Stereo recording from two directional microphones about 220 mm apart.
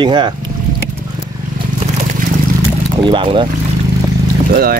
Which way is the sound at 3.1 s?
20° right (ahead or behind).